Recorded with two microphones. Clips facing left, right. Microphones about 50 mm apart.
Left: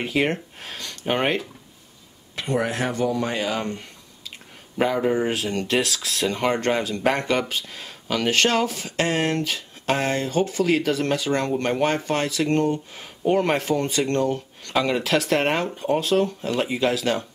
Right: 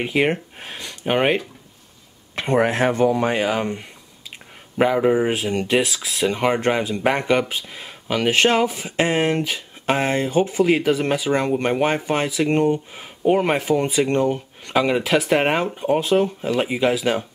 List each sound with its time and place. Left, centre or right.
0.0 s speech: centre
2.3 s speech: right; by 17.3 s centre